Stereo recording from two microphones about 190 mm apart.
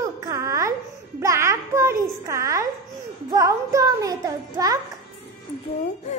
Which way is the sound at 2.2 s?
15° right (ahead or behind).